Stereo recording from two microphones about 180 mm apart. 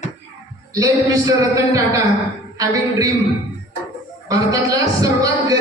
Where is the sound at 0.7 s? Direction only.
20° right (ahead or behind).